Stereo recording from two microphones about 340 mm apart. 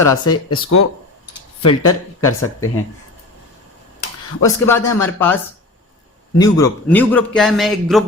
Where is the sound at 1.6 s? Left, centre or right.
Left.